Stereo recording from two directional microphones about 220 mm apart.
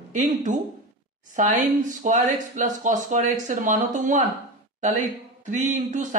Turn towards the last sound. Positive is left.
turn(degrees=-35)  # may be behind; listen again after turning